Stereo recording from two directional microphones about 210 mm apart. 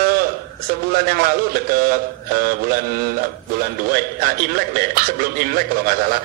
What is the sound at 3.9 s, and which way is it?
A man's voice, 45° right (ahead or behind).